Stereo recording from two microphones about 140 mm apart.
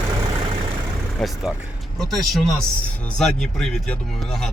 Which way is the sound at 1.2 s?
Centre (ahead or behind).